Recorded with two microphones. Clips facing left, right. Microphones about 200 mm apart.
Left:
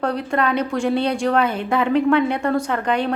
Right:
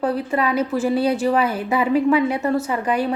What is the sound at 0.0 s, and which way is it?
Speech, 5° right (ahead or behind).